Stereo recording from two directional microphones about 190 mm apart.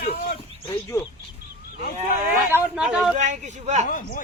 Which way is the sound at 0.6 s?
20° left (ahead or behind).